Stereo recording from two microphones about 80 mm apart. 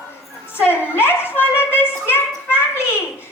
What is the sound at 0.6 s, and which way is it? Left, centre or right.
Speech, left.